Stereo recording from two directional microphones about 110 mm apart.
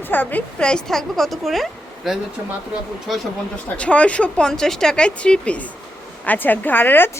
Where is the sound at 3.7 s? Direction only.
10° left (ahead or behind).